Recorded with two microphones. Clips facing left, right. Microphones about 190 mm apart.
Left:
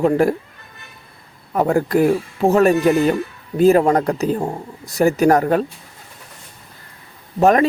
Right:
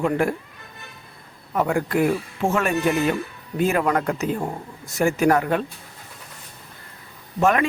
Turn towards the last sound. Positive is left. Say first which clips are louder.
# left 6 dB
turn(degrees=35)  # may be behind; listen again after turning